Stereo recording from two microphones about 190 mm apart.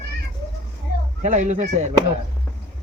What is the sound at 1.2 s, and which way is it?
Speech, 40° right (ahead or behind).